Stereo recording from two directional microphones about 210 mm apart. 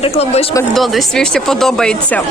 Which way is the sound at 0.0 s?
30° left (ahead or behind).